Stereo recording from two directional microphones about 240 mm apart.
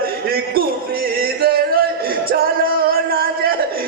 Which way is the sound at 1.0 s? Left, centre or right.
Right.